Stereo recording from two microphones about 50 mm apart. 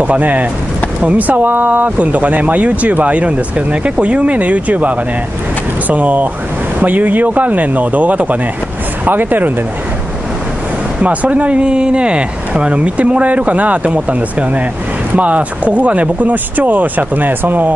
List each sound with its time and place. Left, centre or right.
0.0 s speech: right
11.0 s speech: right